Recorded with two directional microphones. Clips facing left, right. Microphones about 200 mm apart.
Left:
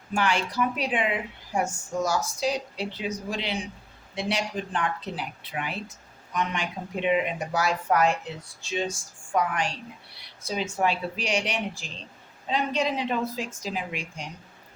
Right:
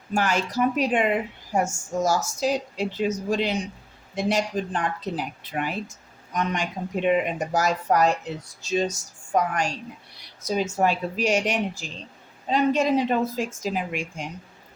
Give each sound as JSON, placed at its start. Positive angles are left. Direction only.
{"t": 0.1, "sound": "speech", "side_deg": -45}